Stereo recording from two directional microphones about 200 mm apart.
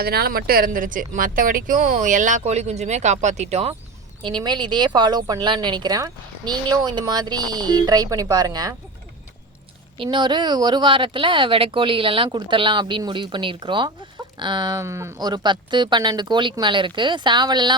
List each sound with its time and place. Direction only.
0.0 s a woman's voice: 50° right (ahead or behind); by 8.7 s 20° right (ahead or behind)
10.0 s speech: 25° right (ahead or behind)